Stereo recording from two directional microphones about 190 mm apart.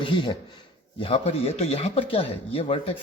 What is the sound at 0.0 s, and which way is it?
Speech, 25° left (ahead or behind).